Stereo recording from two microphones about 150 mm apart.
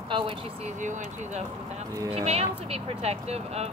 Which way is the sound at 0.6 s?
50° right (ahead or behind).